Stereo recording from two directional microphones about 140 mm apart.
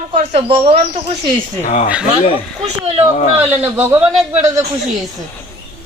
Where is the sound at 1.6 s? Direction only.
55° left (ahead or behind).